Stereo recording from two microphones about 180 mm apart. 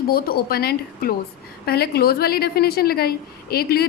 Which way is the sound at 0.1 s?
55° left (ahead or behind).